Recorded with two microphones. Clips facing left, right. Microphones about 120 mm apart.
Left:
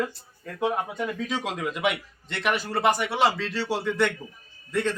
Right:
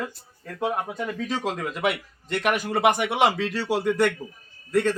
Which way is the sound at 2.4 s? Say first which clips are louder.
Right 2 dB; 50° right (ahead or behind).